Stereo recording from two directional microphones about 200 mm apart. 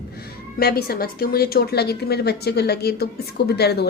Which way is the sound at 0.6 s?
50° left (ahead or behind).